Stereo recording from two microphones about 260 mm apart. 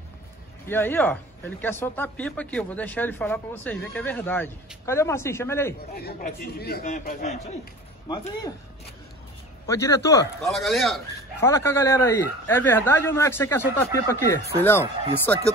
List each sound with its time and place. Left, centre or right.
0.7 s speech: centre
5.9 s a man's voice: left
9.7 s speech: centre
10.4 s speech: centre